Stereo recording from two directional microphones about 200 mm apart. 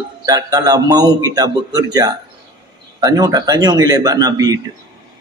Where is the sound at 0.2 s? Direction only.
20° right (ahead or behind).